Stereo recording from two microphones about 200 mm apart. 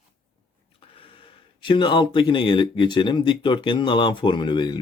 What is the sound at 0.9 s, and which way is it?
Speech, 25° left (ahead or behind).